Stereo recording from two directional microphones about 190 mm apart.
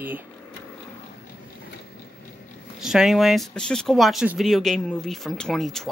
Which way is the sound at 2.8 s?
Centre (ahead or behind).